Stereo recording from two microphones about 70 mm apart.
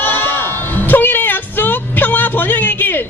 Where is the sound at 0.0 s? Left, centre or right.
Left.